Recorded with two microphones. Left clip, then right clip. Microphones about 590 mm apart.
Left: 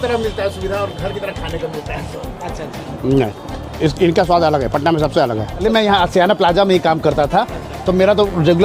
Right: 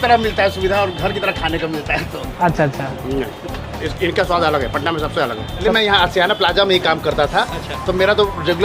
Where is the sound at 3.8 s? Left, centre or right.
Left.